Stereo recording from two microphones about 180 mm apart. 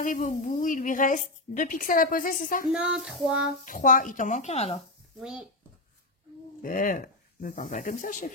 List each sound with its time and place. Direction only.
0.0 s a woman's voice: 45° left (ahead or behind)
2.7 s child singing: 5° right (ahead or behind)
3.6 s a woman's voice: 50° left (ahead or behind)
5.2 s child singing: 5° right (ahead or behind)
6.6 s a woman's voice: 50° left (ahead or behind)